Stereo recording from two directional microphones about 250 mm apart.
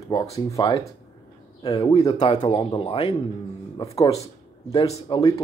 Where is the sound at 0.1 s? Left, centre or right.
Centre.